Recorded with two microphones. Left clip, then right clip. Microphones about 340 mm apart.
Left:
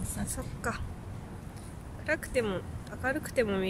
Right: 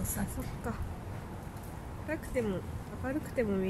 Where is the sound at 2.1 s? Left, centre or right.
Left.